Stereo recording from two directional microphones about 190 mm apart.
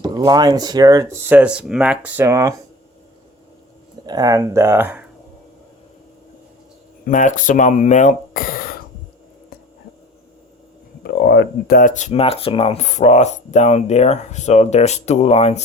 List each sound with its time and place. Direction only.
0.0 s speech: 20° right (ahead or behind)
4.0 s speech: 20° right (ahead or behind)
7.0 s speech: 45° left (ahead or behind)
11.0 s speech: 55° left (ahead or behind); by 15.6 s 35° left (ahead or behind)